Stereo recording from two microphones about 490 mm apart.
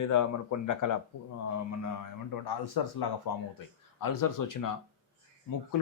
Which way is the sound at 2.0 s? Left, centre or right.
Left.